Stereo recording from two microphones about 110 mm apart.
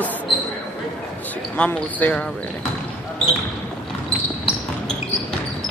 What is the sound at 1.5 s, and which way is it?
Speech, 10° left (ahead or behind).